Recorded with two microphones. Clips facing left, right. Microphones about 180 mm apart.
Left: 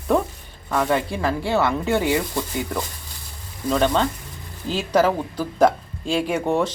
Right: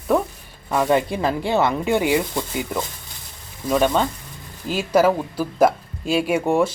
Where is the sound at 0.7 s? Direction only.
20° right (ahead or behind).